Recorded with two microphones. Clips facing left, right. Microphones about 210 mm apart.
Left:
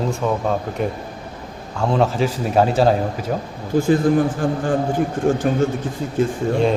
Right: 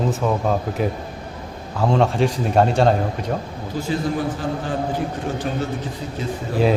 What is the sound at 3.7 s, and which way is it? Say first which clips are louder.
A man's voice: left 8 dB; 50° left (ahead or behind).